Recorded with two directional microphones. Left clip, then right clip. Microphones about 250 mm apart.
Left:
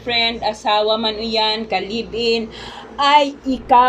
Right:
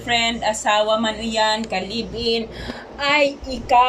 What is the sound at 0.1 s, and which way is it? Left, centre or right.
Speech, centre.